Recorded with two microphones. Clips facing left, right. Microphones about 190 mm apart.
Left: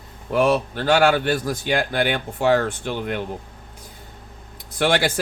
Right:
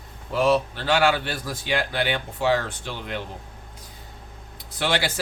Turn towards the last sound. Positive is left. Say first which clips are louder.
# left 5 dB
turn(degrees=50)  # may be behind; listen again after turning